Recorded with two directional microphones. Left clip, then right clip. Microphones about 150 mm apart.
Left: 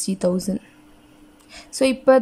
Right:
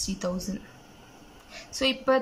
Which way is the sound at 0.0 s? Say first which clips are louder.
Left 9 dB; 40° left (ahead or behind).